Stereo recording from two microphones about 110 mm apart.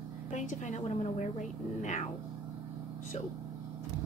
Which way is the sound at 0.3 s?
90° left.